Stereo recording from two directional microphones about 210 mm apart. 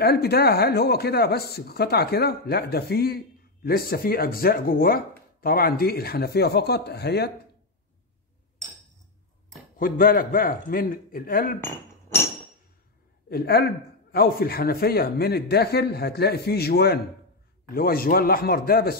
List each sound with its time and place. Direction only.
0.0 s speech: 50° left (ahead or behind)
9.8 s speech: 40° left (ahead or behind)
11.6 s chink: 10° left (ahead or behind)
13.3 s speech: 50° left (ahead or behind)